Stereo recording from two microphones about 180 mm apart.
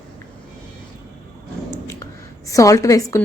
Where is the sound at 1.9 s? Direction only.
15° left (ahead or behind).